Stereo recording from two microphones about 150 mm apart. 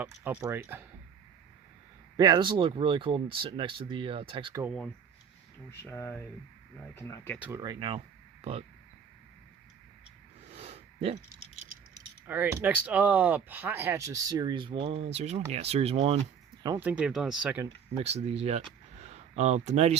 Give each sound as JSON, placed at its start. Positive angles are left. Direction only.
{"t": 0.0, "sound": "speech", "side_deg": -10}
{"t": 2.1, "sound": "speech", "side_deg": -30}
{"t": 5.8, "sound": "speech", "side_deg": 15}
{"t": 7.3, "sound": "speech", "side_deg": -10}
{"t": 7.6, "sound": "speech", "side_deg": -30}
{"t": 10.5, "sound": "a sound", "side_deg": -45}
{"t": 12.2, "sound": "speech", "side_deg": -10}
{"t": 16.8, "sound": "speech", "side_deg": -10}
{"t": 17.9, "sound": "speech", "side_deg": -45}